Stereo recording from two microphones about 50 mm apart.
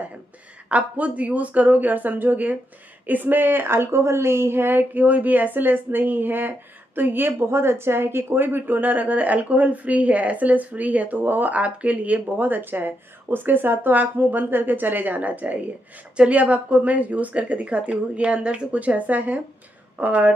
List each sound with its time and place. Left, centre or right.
0.7 s a woman's voice: right
7.4 s a woman's voice: right